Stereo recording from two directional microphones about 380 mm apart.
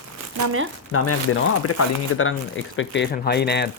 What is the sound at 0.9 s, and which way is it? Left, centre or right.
Speech, left.